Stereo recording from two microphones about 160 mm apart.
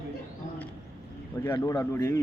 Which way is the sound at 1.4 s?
20° left (ahead or behind).